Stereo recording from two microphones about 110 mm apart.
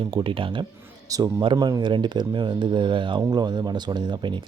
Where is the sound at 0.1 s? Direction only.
50° right (ahead or behind).